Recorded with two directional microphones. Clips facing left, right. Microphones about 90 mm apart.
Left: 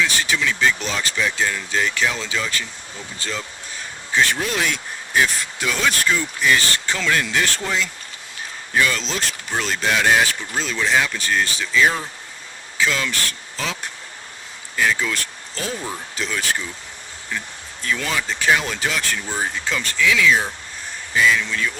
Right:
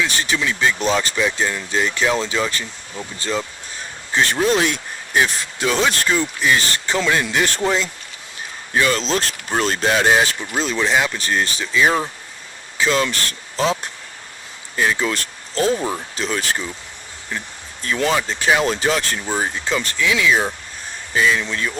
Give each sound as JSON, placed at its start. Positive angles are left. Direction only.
{"t": 0.2, "sound": "speech", "side_deg": -25}
{"t": 1.2, "sound": "speech", "side_deg": -20}
{"t": 10.1, "sound": "speech", "side_deg": -20}
{"t": 14.8, "sound": "speech", "side_deg": -20}
{"t": 15.5, "sound": "speech", "side_deg": -40}
{"t": 16.1, "sound": "speech", "side_deg": -25}
{"t": 17.8, "sound": "speech", "side_deg": -30}
{"t": 18.2, "sound": "speech", "side_deg": -20}
{"t": 18.6, "sound": "speech", "side_deg": -30}